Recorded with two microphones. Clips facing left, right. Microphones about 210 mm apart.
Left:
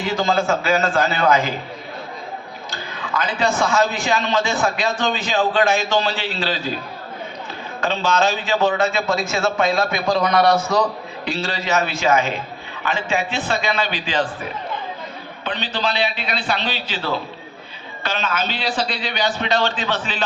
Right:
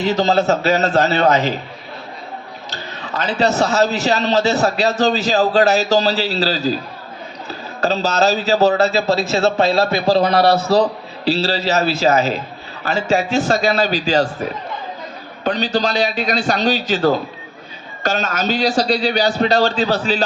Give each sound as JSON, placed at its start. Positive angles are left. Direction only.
{"t": 0.0, "sound": "a man's voice", "side_deg": -40}
{"t": 2.7, "sound": "a man's voice", "side_deg": -40}
{"t": 7.8, "sound": "a man's voice", "side_deg": -40}
{"t": 15.4, "sound": "a man's voice", "side_deg": -45}